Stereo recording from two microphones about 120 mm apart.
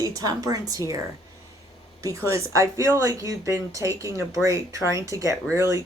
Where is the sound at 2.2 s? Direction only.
25° right (ahead or behind).